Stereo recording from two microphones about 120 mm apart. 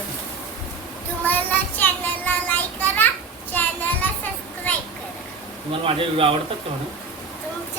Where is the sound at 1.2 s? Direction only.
15° left (ahead or behind).